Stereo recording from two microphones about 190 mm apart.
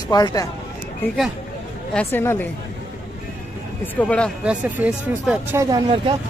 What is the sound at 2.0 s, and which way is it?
Speech, 10° left (ahead or behind).